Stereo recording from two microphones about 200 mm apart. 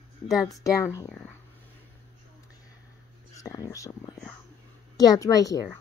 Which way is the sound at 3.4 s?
15° left (ahead or behind).